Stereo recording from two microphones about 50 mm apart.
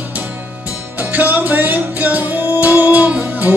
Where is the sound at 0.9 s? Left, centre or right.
Right.